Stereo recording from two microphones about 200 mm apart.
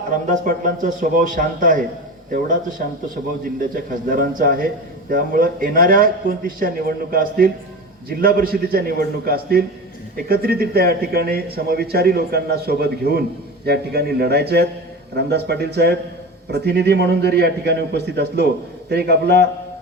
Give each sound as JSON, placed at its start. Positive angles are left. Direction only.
{"t": 0.3, "sound": "a man's voice", "side_deg": -40}
{"t": 4.1, "sound": "a man's voice", "side_deg": -45}